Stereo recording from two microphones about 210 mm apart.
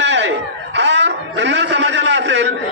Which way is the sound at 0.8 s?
55° right (ahead or behind).